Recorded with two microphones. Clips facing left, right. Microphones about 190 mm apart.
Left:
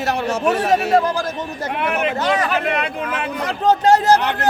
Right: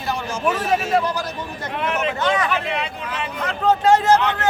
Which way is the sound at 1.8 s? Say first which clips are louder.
Left 2 dB; 60° left (ahead or behind).